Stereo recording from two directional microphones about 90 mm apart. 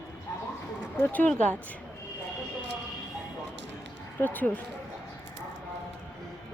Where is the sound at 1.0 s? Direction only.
15° left (ahead or behind).